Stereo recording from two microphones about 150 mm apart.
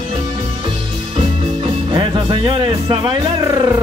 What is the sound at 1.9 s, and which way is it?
Music, 30° right (ahead or behind).